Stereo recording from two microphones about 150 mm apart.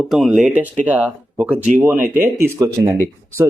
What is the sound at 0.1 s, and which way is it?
Speech, centre (ahead or behind).